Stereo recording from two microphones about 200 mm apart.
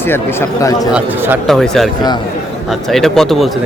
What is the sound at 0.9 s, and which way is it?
Speech, centre (ahead or behind).